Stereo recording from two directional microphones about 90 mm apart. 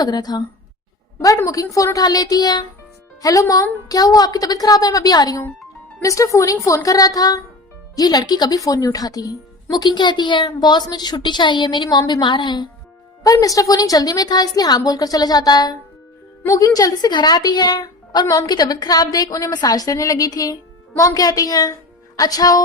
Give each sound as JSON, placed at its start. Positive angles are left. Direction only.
{"t": 0.0, "sound": "a woman's voice", "side_deg": 45}
{"t": 1.7, "sound": "a woman's voice", "side_deg": 35}
{"t": 6.0, "sound": "a woman's voice", "side_deg": 35}
{"t": 13.2, "sound": "a woman's voice", "side_deg": 40}